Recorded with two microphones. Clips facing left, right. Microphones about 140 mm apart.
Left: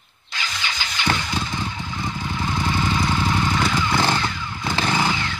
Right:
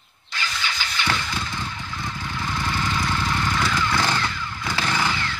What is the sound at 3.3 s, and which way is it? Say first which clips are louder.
Motorcycle: left 2 dB; 20° left (ahead or behind).